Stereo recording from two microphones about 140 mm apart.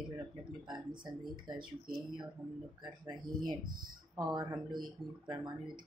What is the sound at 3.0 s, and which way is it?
Speech, 30° right (ahead or behind).